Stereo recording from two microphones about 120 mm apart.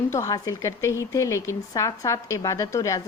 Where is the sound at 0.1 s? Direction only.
25° left (ahead or behind).